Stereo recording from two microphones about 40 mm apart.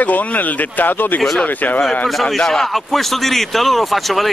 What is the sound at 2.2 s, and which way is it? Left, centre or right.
Speech, centre.